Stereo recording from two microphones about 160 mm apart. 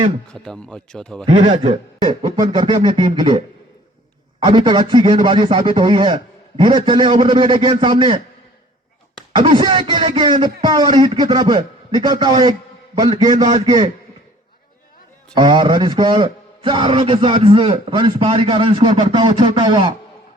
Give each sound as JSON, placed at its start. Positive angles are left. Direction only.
{"t": 0.3, "sound": "speech", "side_deg": 5}
{"t": 1.2, "sound": "a man's voice", "side_deg": -35}
{"t": 9.3, "sound": "a man's voice", "side_deg": -30}
{"t": 13.3, "sound": "a man's voice", "side_deg": -50}
{"t": 13.7, "sound": "a man's voice", "side_deg": -25}
{"t": 15.4, "sound": "a man's voice", "side_deg": -30}